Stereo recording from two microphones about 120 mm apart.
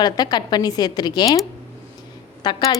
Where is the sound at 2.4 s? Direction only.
35° left (ahead or behind).